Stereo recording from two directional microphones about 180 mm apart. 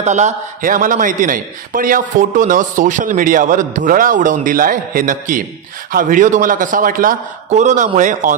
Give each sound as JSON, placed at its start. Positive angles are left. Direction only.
{"t": 0.0, "sound": "a man's voice", "side_deg": -40}